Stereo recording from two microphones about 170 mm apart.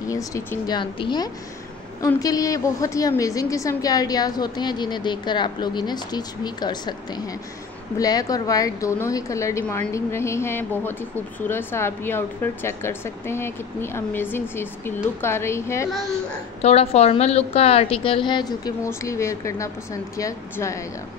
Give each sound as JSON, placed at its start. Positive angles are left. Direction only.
{"t": 0.1, "sound": "a woman's voice", "side_deg": 20}
{"t": 0.7, "sound": "a woman's voice", "side_deg": 25}
{"t": 16.6, "sound": "a woman's voice", "side_deg": 35}